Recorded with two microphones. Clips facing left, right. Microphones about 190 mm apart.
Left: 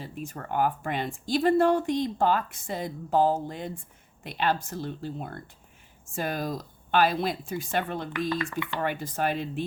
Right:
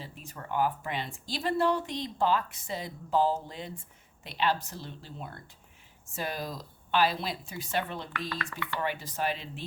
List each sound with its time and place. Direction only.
0.0 s speech: 50° left (ahead or behind)
8.5 s speech: 20° left (ahead or behind)
8.8 s speech: 50° left (ahead or behind)